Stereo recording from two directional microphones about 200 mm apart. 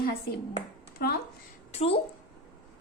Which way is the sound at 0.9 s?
50° left (ahead or behind).